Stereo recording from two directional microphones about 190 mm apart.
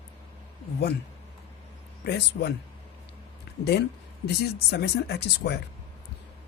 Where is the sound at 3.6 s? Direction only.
60° left (ahead or behind).